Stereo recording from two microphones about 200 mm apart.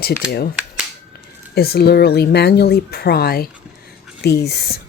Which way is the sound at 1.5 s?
50° left (ahead or behind).